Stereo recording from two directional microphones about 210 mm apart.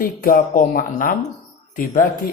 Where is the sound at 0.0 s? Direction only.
45° left (ahead or behind).